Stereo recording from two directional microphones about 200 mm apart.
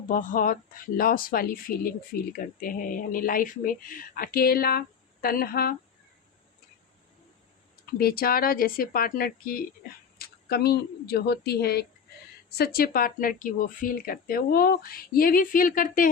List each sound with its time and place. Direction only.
0.1 s speech: 40° left (ahead or behind)
7.9 s a woman's voice: 50° left (ahead or behind)